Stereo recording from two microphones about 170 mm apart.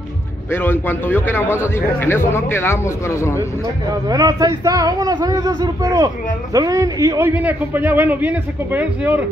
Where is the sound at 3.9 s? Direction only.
20° right (ahead or behind).